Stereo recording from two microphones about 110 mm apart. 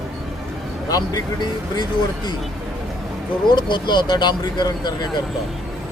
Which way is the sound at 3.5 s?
45° left (ahead or behind).